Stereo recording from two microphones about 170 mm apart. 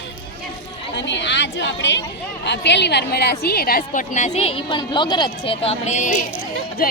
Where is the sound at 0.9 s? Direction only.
90° left.